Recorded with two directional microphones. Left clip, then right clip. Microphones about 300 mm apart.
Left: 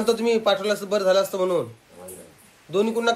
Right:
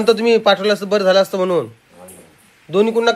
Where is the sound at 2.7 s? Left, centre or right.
Right.